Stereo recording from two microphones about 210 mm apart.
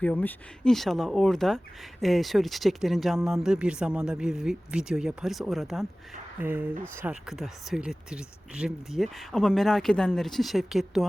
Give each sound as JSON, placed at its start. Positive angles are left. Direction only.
{"t": 0.0, "sound": "speech", "side_deg": 5}